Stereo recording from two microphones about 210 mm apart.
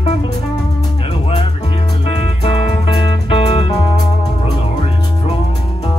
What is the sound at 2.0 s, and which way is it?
Music, 30° left (ahead or behind).